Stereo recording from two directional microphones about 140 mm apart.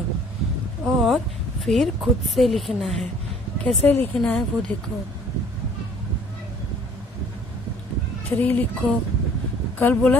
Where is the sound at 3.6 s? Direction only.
10° left (ahead or behind).